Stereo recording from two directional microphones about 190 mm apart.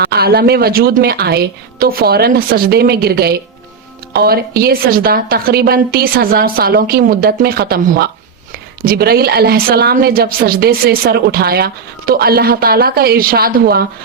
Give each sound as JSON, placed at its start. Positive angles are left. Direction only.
{"t": 0.1, "sound": "a woman's voice", "side_deg": -55}